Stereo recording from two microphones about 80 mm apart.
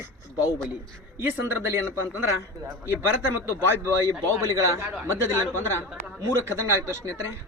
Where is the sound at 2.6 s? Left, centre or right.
Right.